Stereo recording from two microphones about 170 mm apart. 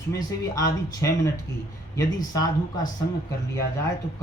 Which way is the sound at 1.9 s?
20° left (ahead or behind).